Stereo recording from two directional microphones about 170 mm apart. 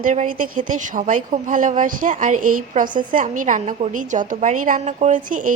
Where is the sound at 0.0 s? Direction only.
50° right (ahead or behind).